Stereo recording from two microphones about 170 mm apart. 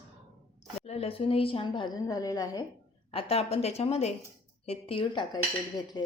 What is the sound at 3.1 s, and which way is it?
A woman's voice, 35° left (ahead or behind).